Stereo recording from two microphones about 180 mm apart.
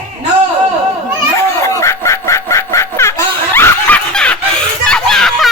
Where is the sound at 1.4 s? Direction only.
15° left (ahead or behind).